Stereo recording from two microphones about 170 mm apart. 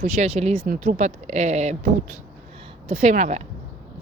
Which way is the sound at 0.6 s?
50° right (ahead or behind).